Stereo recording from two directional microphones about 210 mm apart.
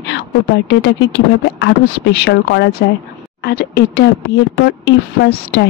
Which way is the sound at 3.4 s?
50° left (ahead or behind).